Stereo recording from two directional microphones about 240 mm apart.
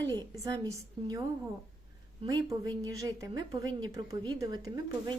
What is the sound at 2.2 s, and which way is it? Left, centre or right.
A woman's voice, centre.